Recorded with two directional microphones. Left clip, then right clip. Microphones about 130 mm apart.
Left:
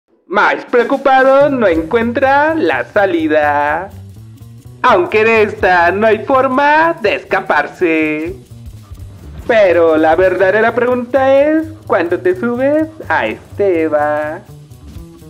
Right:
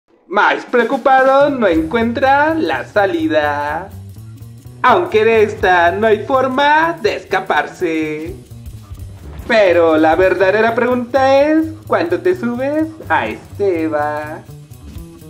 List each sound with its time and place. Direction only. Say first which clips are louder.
0.3 s speech: left 1 dB; 25° left (ahead or behind)
9.5 s speech: left 2 dB; 35° left (ahead or behind)